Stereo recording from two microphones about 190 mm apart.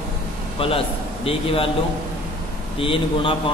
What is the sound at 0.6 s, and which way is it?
A man's voice, 30° left (ahead or behind).